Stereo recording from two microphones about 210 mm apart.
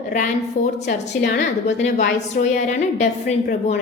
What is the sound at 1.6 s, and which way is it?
A woman's voice, 35° left (ahead or behind).